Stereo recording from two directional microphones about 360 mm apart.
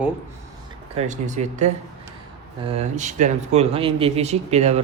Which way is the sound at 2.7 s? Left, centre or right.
Centre.